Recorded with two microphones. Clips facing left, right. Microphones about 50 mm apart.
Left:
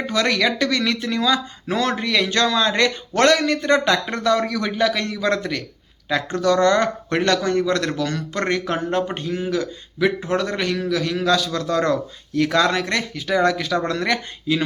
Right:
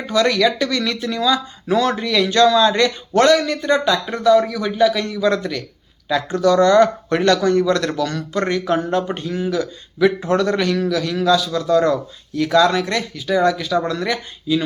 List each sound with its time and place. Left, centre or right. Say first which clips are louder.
0.1 s speech: right 5 dB; left
9.2 s a man's voice: right 2 dB; left
11.3 s speech: right 5 dB; left